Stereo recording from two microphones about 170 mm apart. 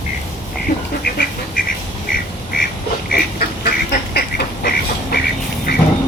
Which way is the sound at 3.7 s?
65° left (ahead or behind).